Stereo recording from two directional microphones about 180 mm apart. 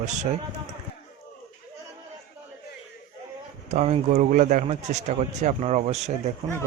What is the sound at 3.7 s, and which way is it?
Speech, 40° right (ahead or behind).